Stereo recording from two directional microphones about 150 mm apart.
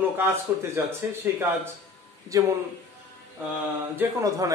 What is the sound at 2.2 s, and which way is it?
Speech, 25° right (ahead or behind).